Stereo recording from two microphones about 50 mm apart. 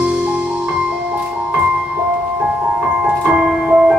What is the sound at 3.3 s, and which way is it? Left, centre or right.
Music, centre.